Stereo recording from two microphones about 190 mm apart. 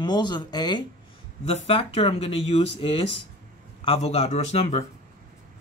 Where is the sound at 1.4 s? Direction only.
30° left (ahead or behind).